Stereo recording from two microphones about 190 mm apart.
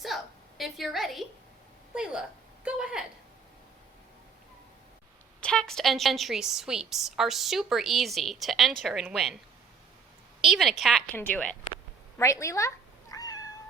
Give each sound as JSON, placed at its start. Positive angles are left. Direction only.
{"t": 0.0, "sound": "a sound", "side_deg": 0}
{"t": 1.9, "sound": "a woman's voice", "side_deg": -5}
{"t": 5.4, "sound": "a woman's voice", "side_deg": 5}
{"t": 10.4, "sound": "a woman's voice", "side_deg": 0}
{"t": 11.1, "sound": "a woman's voice", "side_deg": 10}
{"t": 12.1, "sound": "cat", "side_deg": 15}